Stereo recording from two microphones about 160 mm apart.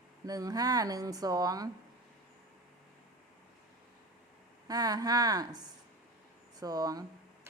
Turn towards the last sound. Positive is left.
turn(degrees=-25)  # may be behind; listen again after turning